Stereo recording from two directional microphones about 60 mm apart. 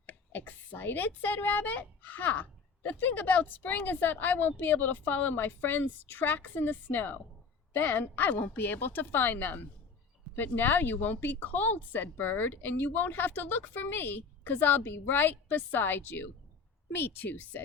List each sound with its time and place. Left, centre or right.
0.0 s a woman's voice: left